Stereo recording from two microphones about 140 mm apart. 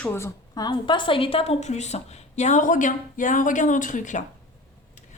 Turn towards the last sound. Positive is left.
turn(degrees=65)  # may be behind; listen again after turning